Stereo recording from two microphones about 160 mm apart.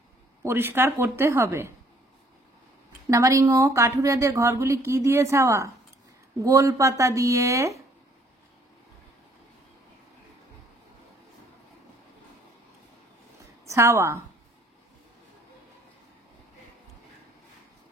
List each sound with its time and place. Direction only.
0.4 s a woman's voice: 15° right (ahead or behind)
3.1 s a woman's voice: 20° right (ahead or behind)
13.7 s a woman's voice: 15° right (ahead or behind)